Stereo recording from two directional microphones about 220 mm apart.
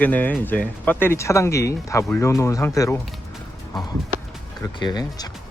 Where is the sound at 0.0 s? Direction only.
5° left (ahead or behind).